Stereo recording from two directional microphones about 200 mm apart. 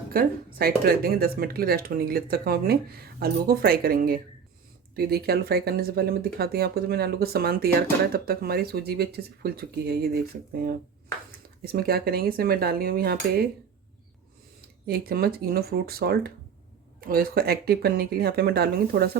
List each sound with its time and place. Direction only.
0.1 s speech: 50° right (ahead or behind)
14.8 s speech: 50° right (ahead or behind)